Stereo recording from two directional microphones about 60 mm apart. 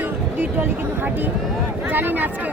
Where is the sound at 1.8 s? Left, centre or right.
Right.